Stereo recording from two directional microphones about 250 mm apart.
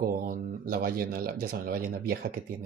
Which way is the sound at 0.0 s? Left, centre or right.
Right.